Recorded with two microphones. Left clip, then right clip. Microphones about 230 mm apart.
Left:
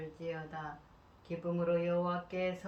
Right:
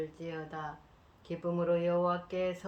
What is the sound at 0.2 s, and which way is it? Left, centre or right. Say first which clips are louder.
Speech: right 1 dB; right.